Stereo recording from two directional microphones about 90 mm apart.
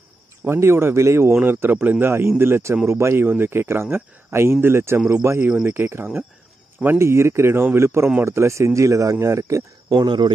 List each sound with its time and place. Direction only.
0.5 s speech: 30° right (ahead or behind)
9.9 s speech: 55° right (ahead or behind)